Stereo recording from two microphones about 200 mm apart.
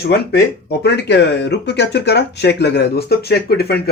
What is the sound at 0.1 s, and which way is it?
Speech, 55° left (ahead or behind).